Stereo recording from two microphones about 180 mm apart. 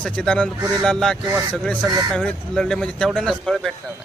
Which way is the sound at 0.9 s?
Centre (ahead or behind).